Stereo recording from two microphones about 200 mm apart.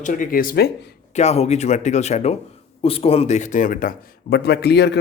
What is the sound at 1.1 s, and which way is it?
Speech, 30° left (ahead or behind).